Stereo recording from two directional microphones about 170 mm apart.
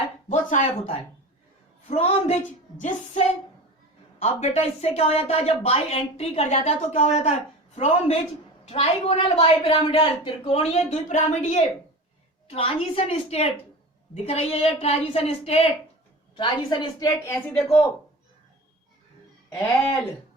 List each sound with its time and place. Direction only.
0.3 s a woman's voice: 40° left (ahead or behind)
17.1 s a woman's voice: 15° left (ahead or behind)